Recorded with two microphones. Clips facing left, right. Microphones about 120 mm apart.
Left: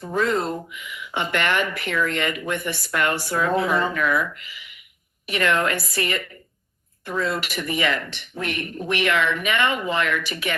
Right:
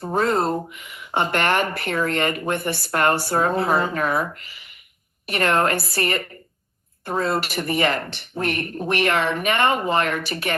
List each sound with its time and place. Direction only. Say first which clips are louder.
0.0 s speech: right 2 dB; 35° right (ahead or behind)